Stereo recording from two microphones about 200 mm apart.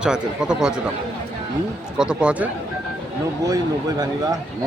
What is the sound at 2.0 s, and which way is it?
Speech, 5° right (ahead or behind).